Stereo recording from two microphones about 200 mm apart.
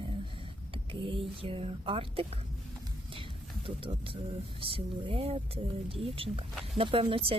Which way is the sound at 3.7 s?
25° right (ahead or behind).